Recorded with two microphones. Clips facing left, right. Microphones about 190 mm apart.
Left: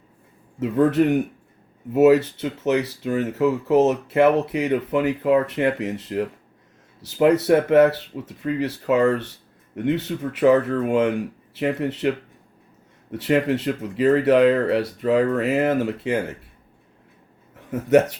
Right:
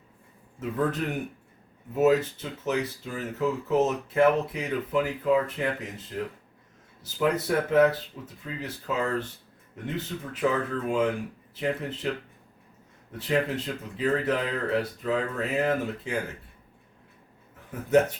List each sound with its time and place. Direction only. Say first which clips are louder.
0.6 s speech: left 10 dB; 75° left (ahead or behind)
17.7 s speech: left 5 dB; 80° left